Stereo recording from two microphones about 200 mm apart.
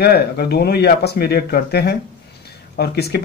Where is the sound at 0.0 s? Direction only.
50° left (ahead or behind).